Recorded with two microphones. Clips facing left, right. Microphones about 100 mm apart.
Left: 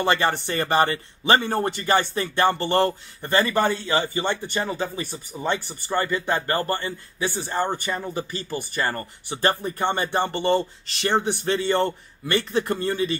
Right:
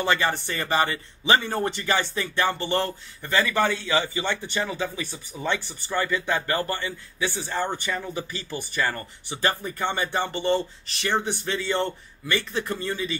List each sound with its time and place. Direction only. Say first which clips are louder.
0.0 s a man's voice: left 2 dB; 50° left (ahead or behind)